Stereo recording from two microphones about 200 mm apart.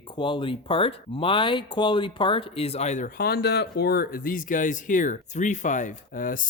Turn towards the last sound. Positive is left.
turn(degrees=40)  # may be behind; listen again after turning